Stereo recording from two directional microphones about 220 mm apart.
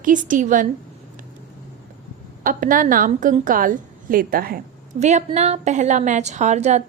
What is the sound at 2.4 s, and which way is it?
A woman's voice, 40° right (ahead or behind).